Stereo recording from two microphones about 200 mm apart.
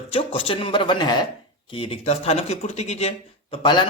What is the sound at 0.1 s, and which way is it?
Speech, 30° left (ahead or behind).